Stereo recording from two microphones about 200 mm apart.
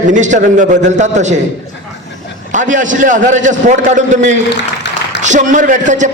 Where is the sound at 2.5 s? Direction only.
40° right (ahead or behind).